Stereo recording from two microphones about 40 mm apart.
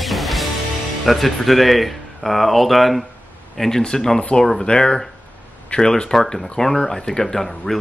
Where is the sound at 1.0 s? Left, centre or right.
Centre.